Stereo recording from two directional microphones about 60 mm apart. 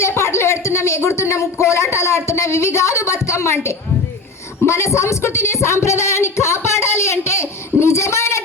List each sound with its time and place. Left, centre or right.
0.2 s speech: left